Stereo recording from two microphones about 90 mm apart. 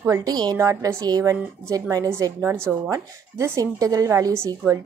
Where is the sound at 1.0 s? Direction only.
45° right (ahead or behind).